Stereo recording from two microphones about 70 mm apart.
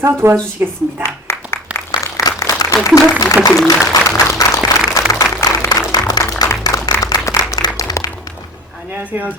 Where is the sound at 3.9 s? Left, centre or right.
Left.